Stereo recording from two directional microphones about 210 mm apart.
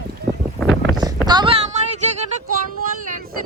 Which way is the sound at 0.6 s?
Centre (ahead or behind).